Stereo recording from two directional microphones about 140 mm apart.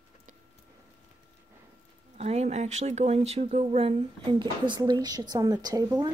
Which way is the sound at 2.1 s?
50° right (ahead or behind).